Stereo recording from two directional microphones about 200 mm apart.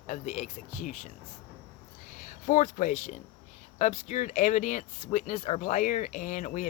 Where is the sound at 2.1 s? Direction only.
40° left (ahead or behind).